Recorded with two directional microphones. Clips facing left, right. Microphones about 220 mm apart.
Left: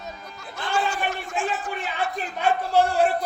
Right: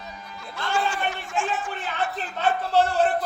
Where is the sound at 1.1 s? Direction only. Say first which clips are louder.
Even; 35° left (ahead or behind).